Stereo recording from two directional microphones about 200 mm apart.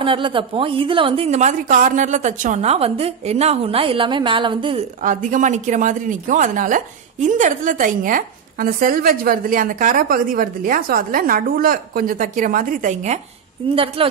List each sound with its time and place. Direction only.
0.0 s a woman's voice: 25° right (ahead or behind)
5.0 s a woman's voice: 40° right (ahead or behind)
14.0 s a woman's voice: 25° right (ahead or behind)